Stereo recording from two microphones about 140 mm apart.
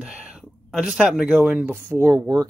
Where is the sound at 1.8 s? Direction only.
20° right (ahead or behind).